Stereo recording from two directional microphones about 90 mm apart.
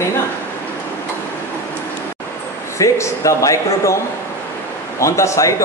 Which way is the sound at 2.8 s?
35° left (ahead or behind).